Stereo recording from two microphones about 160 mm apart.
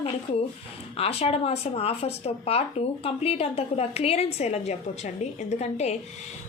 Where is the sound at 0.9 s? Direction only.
40° left (ahead or behind).